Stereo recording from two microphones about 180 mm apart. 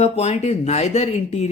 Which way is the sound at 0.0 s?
40° left (ahead or behind).